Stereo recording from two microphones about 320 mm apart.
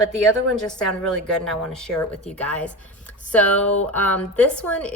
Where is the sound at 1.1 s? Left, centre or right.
Centre.